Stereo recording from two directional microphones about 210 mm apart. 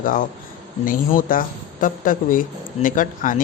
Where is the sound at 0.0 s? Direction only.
40° left (ahead or behind).